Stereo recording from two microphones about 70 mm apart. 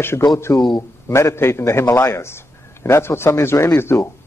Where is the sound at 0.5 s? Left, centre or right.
Left.